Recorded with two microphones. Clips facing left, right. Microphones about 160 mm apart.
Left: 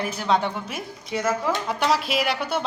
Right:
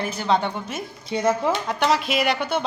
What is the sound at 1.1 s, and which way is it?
Speech, 20° right (ahead or behind).